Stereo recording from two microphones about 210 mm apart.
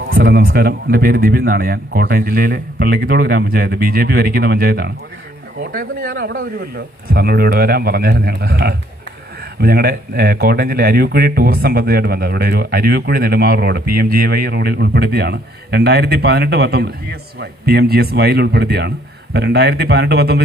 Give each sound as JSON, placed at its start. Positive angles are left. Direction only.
{"t": 0.1, "sound": "speech", "side_deg": -45}